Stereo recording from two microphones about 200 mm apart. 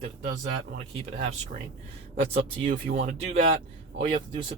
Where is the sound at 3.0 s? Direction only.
45° right (ahead or behind).